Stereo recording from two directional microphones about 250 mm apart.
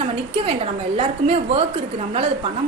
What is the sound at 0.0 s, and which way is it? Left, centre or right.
A woman's voice, right.